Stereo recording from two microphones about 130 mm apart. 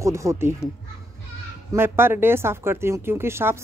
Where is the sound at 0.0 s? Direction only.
25° right (ahead or behind).